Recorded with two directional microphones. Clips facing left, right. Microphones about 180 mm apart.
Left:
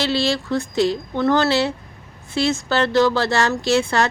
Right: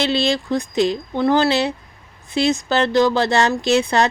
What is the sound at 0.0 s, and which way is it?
Speech, 20° right (ahead or behind).